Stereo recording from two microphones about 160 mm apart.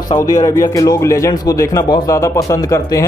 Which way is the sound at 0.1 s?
20° left (ahead or behind).